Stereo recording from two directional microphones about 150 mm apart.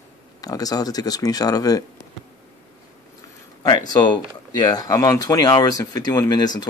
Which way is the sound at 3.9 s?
30° left (ahead or behind).